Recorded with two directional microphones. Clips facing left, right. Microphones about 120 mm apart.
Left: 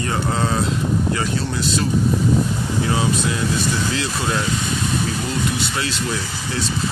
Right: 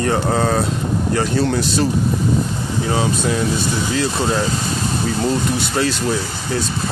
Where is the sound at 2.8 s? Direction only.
30° right (ahead or behind).